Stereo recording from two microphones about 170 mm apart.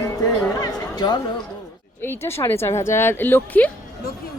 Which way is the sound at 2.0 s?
15° left (ahead or behind).